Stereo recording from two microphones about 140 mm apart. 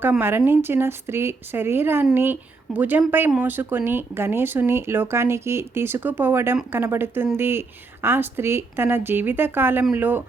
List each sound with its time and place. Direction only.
0.0 s speech: 15° right (ahead or behind)